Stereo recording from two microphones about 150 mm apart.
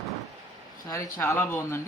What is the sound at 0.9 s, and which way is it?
Speech, 20° left (ahead or behind).